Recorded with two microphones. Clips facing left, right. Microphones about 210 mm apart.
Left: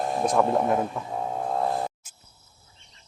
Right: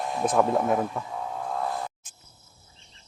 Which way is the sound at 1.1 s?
35° left (ahead or behind).